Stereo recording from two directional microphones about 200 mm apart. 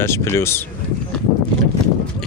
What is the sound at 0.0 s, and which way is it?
Speech, 15° left (ahead or behind).